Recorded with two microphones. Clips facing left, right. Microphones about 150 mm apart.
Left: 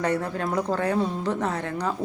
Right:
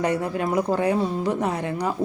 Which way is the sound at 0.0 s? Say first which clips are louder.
Right 2 dB; 10° right (ahead or behind).